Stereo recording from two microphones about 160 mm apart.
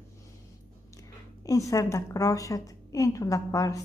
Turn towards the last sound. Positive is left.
turn(degrees=20)  # may be behind; listen again after turning